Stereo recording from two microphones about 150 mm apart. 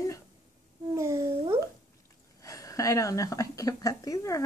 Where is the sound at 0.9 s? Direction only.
20° right (ahead or behind).